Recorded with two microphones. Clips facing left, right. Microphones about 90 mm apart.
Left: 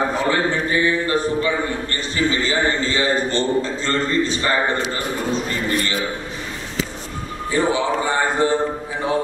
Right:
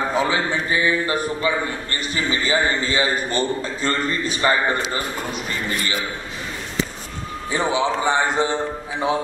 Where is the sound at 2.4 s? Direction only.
10° right (ahead or behind).